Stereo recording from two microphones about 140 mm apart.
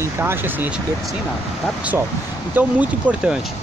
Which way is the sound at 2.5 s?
10° right (ahead or behind).